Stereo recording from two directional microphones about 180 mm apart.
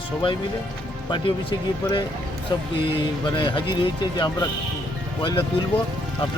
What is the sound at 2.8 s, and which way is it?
Speech, 25° left (ahead or behind).